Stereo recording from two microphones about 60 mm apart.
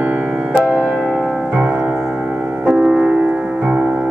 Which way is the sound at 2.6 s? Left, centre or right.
Centre.